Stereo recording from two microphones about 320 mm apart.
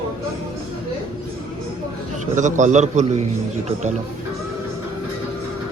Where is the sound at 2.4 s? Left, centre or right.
Right.